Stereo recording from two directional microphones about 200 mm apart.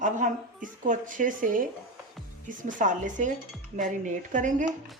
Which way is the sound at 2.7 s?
40° right (ahead or behind).